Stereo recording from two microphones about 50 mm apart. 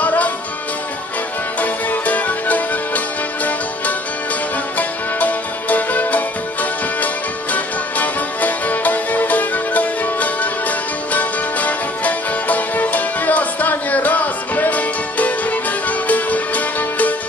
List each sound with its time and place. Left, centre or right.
0.0 s music: left
1.6 s music: left
4.7 s music: left